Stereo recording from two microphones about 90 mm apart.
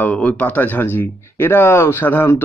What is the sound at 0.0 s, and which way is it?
Speech, 15° left (ahead or behind).